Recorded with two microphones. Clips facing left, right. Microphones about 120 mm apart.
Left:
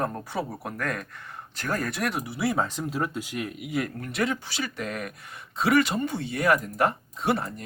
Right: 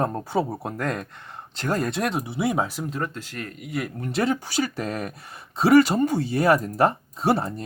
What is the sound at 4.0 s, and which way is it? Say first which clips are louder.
Speech: right 4 dB; 30° right (ahead or behind).